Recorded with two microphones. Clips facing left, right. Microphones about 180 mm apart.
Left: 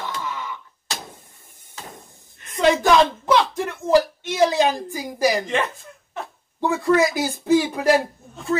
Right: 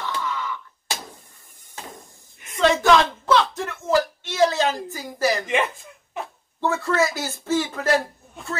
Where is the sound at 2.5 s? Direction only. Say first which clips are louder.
Left 1 dB; 15° left (ahead or behind).